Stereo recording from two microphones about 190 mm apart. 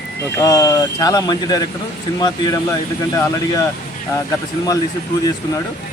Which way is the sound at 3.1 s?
15° left (ahead or behind).